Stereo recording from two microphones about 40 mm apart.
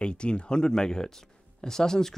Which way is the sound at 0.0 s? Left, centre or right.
Left.